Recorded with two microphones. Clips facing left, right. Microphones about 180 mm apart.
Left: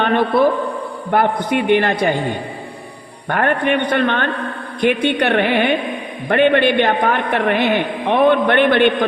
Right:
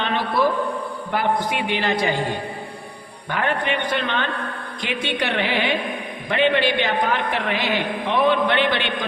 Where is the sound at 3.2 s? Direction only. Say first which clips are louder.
Left 6 dB; 55° left (ahead or behind).